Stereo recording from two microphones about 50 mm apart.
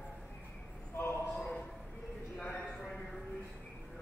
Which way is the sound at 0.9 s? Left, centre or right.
Left.